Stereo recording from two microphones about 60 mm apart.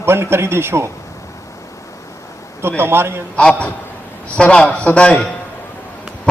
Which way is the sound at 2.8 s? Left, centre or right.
Right.